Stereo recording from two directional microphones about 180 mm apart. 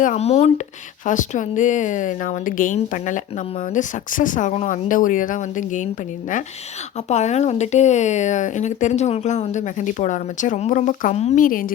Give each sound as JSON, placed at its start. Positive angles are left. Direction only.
{"t": 0.0, "sound": "a woman's voice", "side_deg": 40}
{"t": 7.1, "sound": "speech", "side_deg": 40}